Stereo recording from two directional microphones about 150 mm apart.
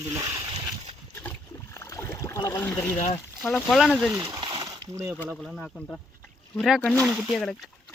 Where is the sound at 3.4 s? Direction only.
5° left (ahead or behind).